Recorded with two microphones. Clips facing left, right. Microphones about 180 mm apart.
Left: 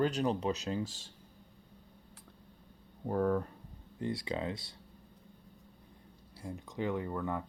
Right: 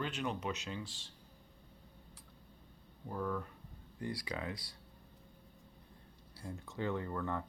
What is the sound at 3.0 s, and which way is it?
Speech, 55° left (ahead or behind).